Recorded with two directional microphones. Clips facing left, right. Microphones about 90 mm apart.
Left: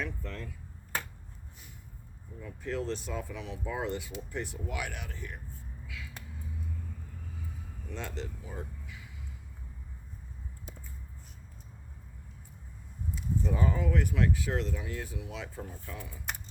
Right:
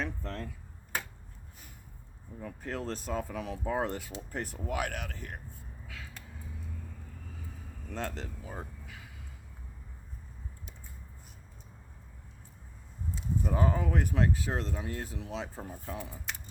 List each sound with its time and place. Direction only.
0.0 s speech: 40° right (ahead or behind)
2.4 s speech: 45° right (ahead or behind)
5.9 s a sound: 40° right (ahead or behind)
7.9 s speech: 40° right (ahead or behind)
13.4 s speech: 45° right (ahead or behind)